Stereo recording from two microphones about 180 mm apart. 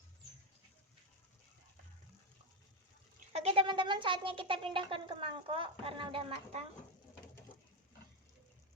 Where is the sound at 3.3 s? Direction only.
35° right (ahead or behind).